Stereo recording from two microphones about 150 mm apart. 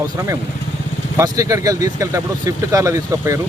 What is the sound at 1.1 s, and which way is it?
Speech, 20° right (ahead or behind).